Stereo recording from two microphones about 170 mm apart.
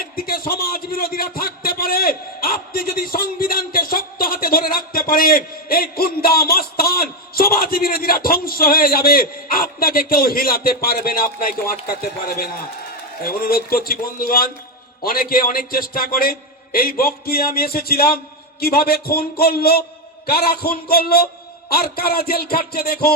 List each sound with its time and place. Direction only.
0.0 s a man's voice: 60° left (ahead or behind)
13.2 s a man's voice: 60° left (ahead or behind)